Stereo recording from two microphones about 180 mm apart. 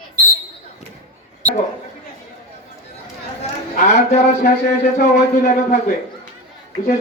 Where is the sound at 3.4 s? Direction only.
40° left (ahead or behind).